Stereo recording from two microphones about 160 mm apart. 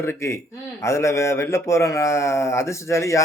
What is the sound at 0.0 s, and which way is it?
Speech, 15° left (ahead or behind).